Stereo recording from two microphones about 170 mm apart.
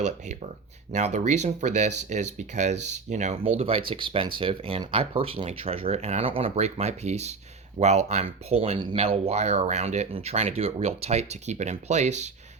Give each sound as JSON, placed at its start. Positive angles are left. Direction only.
{"t": 0.9, "sound": "speech", "side_deg": -40}